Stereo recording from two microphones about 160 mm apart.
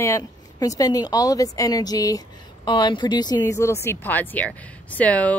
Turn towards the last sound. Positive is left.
turn(degrees=10)  # may be behind; listen again after turning